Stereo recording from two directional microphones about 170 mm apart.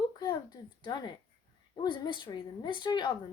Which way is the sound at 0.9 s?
25° left (ahead or behind).